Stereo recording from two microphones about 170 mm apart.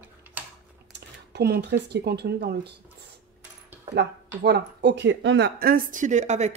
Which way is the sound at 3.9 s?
75° right (ahead or behind).